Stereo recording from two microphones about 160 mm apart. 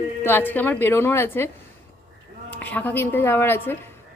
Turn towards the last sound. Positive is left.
turn(degrees=15)  # may be behind; listen again after turning